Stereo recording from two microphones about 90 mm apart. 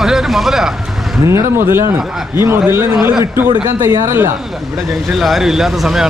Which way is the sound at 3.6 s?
40° right (ahead or behind).